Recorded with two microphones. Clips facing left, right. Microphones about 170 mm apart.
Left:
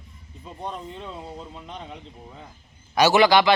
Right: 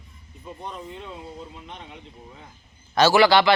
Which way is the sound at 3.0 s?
20° left (ahead or behind).